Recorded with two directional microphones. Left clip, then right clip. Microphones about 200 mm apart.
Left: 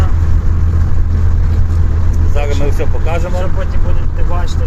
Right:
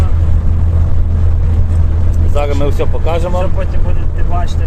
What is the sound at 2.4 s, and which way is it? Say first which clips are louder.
Speech: right 3 dB; 20° right (ahead or behind).